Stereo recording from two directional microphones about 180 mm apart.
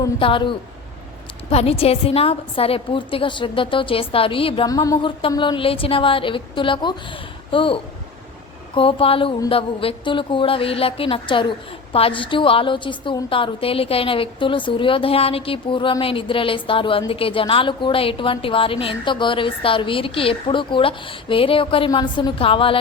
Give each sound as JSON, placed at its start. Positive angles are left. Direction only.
{"t": 0.0, "sound": "speech", "side_deg": 30}